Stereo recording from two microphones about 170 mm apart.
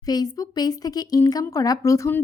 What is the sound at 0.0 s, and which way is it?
Speech, 20° left (ahead or behind).